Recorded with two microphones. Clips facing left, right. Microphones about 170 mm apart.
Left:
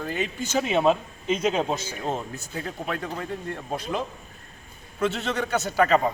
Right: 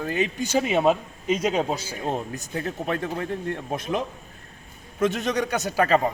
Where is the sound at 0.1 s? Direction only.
15° right (ahead or behind).